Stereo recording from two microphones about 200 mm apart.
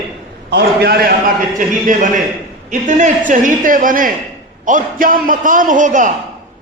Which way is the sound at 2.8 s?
40° right (ahead or behind).